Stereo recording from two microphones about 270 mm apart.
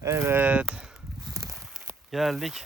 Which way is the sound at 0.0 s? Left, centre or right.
Centre.